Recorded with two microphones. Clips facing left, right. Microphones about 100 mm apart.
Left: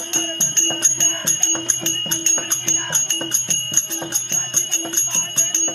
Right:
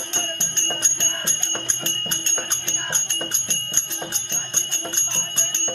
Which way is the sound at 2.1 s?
5° right (ahead or behind).